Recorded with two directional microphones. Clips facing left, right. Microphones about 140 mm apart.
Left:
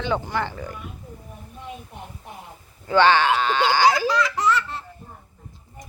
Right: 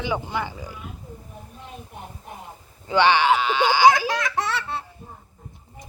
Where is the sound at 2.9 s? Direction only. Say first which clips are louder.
Left 1 dB; 15° right (ahead or behind).